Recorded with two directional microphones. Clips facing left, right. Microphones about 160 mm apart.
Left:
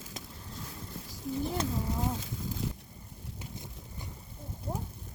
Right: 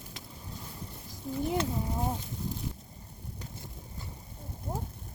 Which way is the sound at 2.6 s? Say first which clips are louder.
Left 3 dB; 90° left.